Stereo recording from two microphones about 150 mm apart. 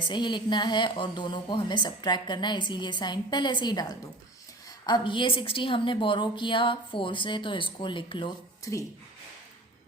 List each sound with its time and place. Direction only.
0.1 s a woman's voice: 30° left (ahead or behind)